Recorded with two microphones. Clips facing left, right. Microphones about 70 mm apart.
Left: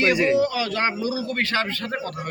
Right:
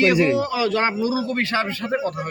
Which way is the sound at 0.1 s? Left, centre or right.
Right.